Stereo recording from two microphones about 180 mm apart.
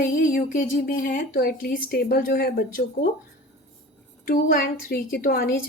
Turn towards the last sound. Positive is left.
turn(degrees=55)  # may be behind; listen again after turning